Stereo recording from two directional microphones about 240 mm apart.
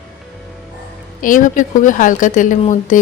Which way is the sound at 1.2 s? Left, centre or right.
Left.